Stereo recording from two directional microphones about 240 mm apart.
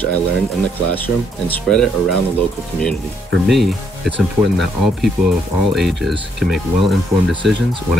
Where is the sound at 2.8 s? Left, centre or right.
Centre.